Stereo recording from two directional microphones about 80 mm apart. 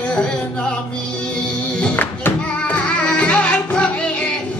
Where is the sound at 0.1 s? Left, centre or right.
Centre.